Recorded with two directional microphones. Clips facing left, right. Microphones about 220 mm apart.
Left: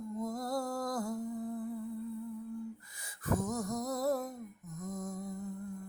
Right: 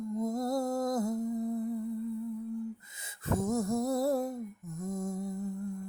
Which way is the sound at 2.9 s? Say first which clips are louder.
Right 1 dB; 25° right (ahead or behind).